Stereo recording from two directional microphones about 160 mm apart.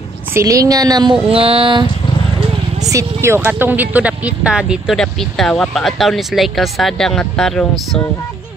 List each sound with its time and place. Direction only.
0.3 s speech: 20° right (ahead or behind)
2.9 s speech: 20° right (ahead or behind); by 8.0 s centre (ahead or behind)